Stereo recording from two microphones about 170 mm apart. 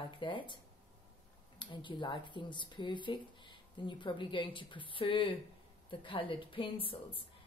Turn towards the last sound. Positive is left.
turn(degrees=30)  # may be behind; listen again after turning